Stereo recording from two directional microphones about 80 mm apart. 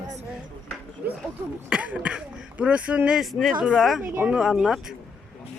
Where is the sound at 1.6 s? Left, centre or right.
Centre.